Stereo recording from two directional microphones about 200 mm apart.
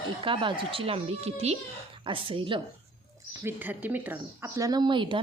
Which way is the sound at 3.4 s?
10° right (ahead or behind).